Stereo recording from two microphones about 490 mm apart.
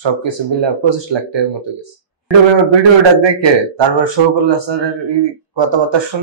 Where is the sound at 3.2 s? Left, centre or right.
Right.